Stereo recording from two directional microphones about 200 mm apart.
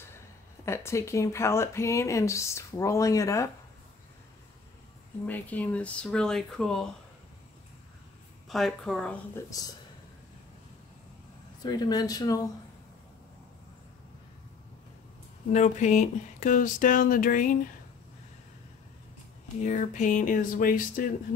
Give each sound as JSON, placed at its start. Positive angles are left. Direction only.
{"t": 0.7, "sound": "speech", "side_deg": 15}
{"t": 5.2, "sound": "speech", "side_deg": 10}
{"t": 8.5, "sound": "speech", "side_deg": 0}
{"t": 9.5, "sound": "speech", "side_deg": 20}
{"t": 11.6, "sound": "speech", "side_deg": 20}
{"t": 15.5, "sound": "a sound", "side_deg": 35}
{"t": 19.6, "sound": "a sound", "side_deg": 40}